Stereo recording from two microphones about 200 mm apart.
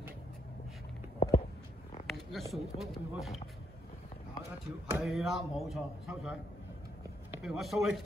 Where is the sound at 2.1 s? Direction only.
Centre (ahead or behind).